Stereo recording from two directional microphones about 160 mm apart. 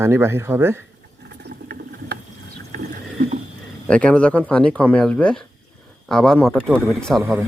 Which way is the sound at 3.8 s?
10° left (ahead or behind).